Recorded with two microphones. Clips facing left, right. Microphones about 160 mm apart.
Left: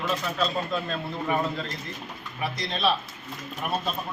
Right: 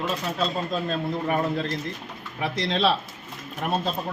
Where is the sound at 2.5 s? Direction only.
90° right.